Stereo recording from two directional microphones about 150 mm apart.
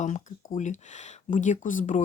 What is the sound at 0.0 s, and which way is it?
Speech, 55° left (ahead or behind).